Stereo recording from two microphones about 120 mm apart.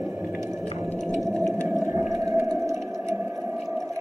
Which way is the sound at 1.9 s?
25° right (ahead or behind).